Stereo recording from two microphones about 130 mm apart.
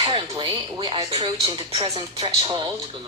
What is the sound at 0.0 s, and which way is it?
Speech, 40° right (ahead or behind).